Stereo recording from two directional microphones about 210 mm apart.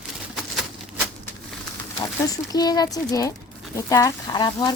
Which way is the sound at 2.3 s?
20° left (ahead or behind).